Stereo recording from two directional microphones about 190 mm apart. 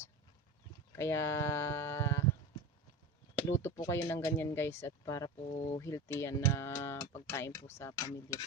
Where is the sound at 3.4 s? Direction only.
15° left (ahead or behind).